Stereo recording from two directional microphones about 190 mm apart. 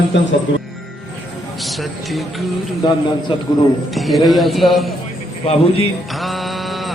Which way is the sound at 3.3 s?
25° left (ahead or behind).